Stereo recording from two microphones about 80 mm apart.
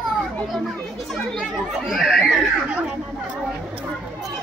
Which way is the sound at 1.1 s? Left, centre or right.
Centre.